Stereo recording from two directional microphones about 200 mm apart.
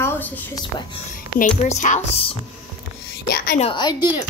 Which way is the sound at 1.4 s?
35° left (ahead or behind).